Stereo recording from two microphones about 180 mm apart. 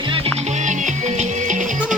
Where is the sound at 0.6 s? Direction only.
45° right (ahead or behind).